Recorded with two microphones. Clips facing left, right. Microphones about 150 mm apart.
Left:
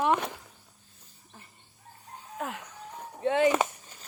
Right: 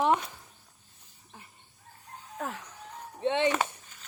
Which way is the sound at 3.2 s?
25° right (ahead or behind).